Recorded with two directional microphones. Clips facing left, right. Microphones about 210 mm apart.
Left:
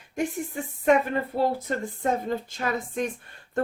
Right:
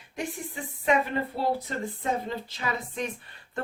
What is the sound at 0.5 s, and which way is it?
Speech, 45° left (ahead or behind).